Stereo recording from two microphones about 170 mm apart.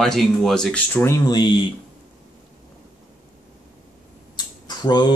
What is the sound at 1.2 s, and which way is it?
Speech, 25° left (ahead or behind).